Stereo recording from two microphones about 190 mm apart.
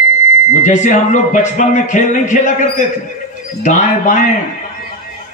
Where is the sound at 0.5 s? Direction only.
40° left (ahead or behind).